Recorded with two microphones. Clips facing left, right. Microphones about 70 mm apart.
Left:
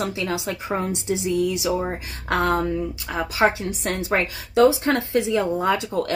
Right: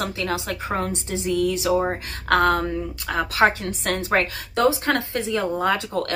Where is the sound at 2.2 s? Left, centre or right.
Right.